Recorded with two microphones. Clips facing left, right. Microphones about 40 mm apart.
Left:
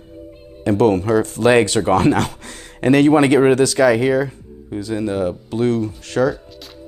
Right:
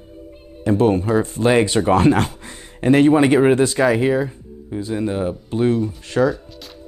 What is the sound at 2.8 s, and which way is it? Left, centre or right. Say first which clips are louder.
Speech: left 1 dB; left.